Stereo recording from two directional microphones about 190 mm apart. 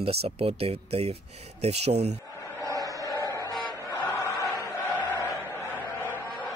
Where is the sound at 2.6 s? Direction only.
15° right (ahead or behind).